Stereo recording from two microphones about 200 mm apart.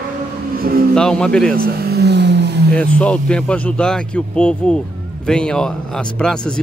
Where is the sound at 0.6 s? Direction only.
50° right (ahead or behind).